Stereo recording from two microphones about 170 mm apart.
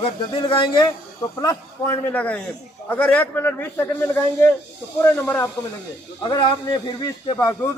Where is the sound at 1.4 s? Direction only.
20° left (ahead or behind).